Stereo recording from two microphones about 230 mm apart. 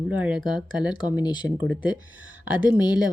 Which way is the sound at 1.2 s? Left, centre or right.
Centre.